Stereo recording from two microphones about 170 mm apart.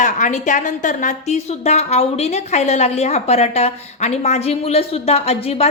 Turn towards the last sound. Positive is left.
turn(degrees=35)  # may be behind; listen again after turning